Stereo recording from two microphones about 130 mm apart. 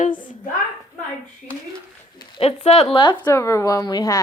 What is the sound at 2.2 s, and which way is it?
Speech, 45° left (ahead or behind).